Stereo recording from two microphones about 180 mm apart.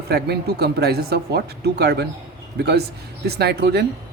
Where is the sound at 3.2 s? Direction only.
65° right (ahead or behind).